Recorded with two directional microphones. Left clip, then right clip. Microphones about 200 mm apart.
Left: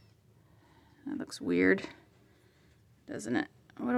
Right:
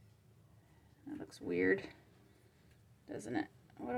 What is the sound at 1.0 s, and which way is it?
Speech, 40° left (ahead or behind).